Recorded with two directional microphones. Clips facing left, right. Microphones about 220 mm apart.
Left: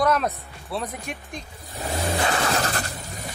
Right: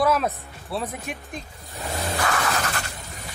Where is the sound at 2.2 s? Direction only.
30° left (ahead or behind).